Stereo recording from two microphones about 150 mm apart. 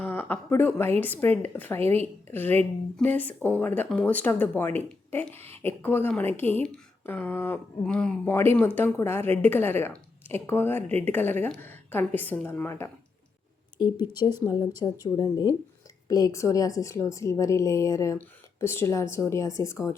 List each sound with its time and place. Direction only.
0.0 s a sound: 15° left (ahead or behind)
1.0 s speech: 10° left (ahead or behind)
13.7 s a woman's voice: 30° left (ahead or behind)